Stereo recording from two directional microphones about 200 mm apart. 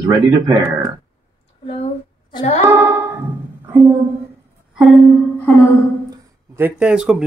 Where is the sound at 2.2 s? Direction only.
25° left (ahead or behind).